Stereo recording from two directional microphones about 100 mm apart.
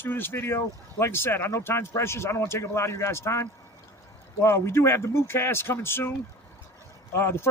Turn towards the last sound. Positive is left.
turn(degrees=25)  # may be behind; listen again after turning